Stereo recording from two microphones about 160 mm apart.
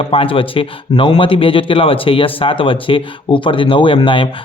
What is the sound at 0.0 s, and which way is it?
Speech, 35° left (ahead or behind).